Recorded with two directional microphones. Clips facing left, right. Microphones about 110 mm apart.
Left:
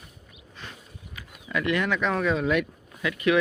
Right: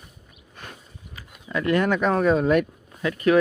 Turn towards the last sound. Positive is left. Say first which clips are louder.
# right 4 dB
turn(degrees=-40)  # may be behind; listen again after turning